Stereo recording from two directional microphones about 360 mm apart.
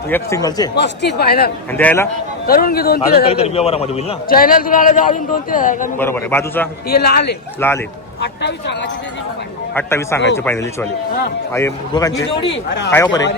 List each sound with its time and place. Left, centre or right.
0.1 s a man's voice: centre
0.8 s a man's voice: left
1.7 s a man's voice: centre
2.5 s a man's voice: left
6.0 s a man's voice: centre
6.8 s a man's voice: left
7.6 s a man's voice: centre
8.4 s a man's voice: left
9.7 s a man's voice: centre